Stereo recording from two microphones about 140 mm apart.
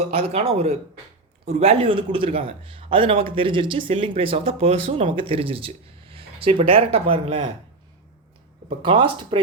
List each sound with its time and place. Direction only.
0.0 s speech: 45° right (ahead or behind)
8.8 s speech: 35° right (ahead or behind)